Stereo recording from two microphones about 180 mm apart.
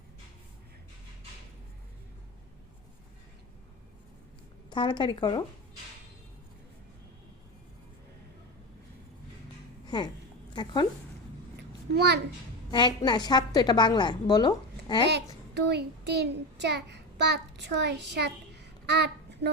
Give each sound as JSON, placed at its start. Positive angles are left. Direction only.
{"t": 4.7, "sound": "a woman's voice", "side_deg": 25}
{"t": 9.8, "sound": "a sound", "side_deg": 25}
{"t": 10.5, "sound": "speech", "side_deg": 25}
{"t": 11.5, "sound": "a sound", "side_deg": -65}
{"t": 12.7, "sound": "a woman's voice", "side_deg": 25}
{"t": 15.5, "sound": "a child's voice", "side_deg": -70}